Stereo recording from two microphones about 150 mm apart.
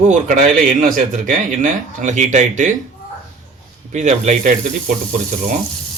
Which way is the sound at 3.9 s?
55° right (ahead or behind).